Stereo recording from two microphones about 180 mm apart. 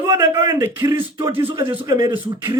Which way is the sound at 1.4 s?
25° right (ahead or behind).